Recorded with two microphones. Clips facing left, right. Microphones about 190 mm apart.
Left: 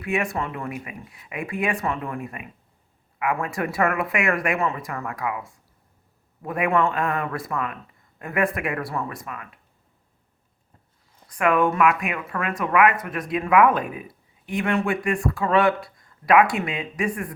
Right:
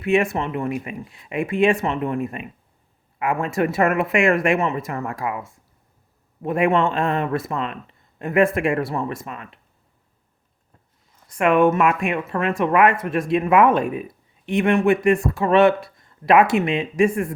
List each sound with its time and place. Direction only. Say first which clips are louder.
0.0 s speech: right 6 dB; 25° right (ahead or behind)
11.3 s speech: right 4 dB; 25° right (ahead or behind)